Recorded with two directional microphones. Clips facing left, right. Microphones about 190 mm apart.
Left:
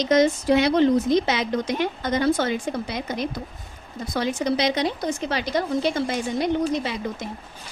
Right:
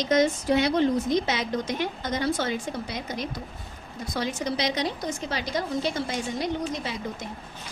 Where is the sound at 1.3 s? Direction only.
70° left (ahead or behind).